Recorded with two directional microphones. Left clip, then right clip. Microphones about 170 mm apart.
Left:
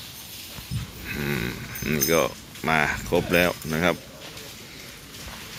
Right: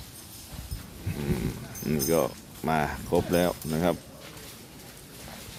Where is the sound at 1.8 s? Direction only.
15° right (ahead or behind).